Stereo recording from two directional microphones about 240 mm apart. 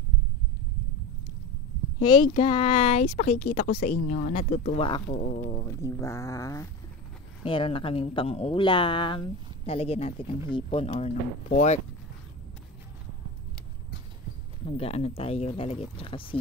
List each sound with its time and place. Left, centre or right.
2.0 s speech: centre
5.7 s speech: centre; by 11.8 s left
14.7 s speech: left